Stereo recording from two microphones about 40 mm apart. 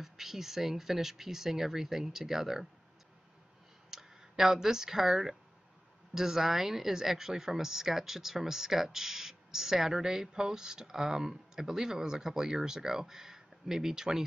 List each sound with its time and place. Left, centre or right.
0.0 s speech: centre
3.9 s speech: centre